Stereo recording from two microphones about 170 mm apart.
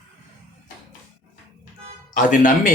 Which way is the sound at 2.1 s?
50° left (ahead or behind).